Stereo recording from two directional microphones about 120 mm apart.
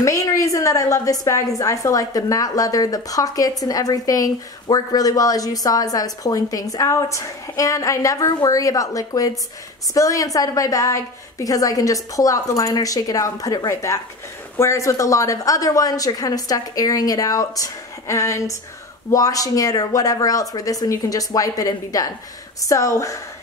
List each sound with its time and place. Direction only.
0.0 s a woman's voice: 25° left (ahead or behind)